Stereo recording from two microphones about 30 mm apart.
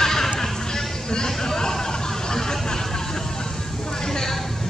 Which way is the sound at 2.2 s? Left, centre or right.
Centre.